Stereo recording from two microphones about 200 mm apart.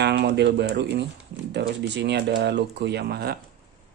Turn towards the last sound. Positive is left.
turn(degrees=-50)  # may be behind; listen again after turning